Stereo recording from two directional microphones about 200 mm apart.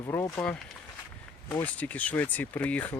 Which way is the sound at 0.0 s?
20° left (ahead or behind).